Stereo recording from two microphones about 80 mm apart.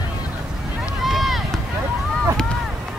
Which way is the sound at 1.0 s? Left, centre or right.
Centre.